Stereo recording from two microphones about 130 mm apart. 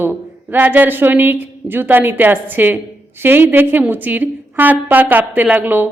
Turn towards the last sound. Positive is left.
turn(degrees=-15)  # may be behind; listen again after turning